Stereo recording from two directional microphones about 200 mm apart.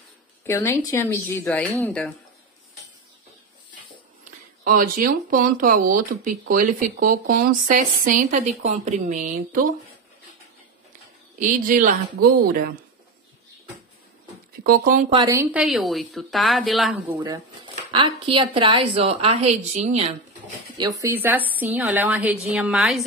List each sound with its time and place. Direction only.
0.5 s speech: 15° left (ahead or behind)
4.6 s speech: 45° right (ahead or behind)
8.4 s speech: 35° right (ahead or behind)
11.3 s speech: 40° right (ahead or behind)
14.6 s speech: 45° right (ahead or behind)
15.2 s a woman's voice: 15° right (ahead or behind)
15.6 s a woman's voice: centre (ahead or behind)
17.2 s speech: 25° right (ahead or behind)
20.7 s a woman's voice: 20° right (ahead or behind); by 23.0 s centre (ahead or behind)